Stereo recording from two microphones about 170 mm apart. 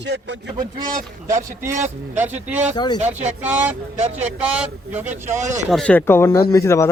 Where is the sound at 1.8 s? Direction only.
10° right (ahead or behind).